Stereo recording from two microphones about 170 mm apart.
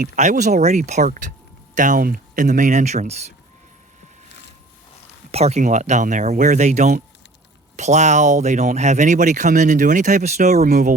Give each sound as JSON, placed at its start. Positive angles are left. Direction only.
{"t": 0.0, "sound": "speech", "side_deg": -45}
{"t": 5.3, "sound": "speech", "side_deg": -40}